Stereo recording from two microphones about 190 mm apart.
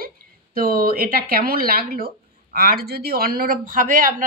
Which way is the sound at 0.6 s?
50° right (ahead or behind).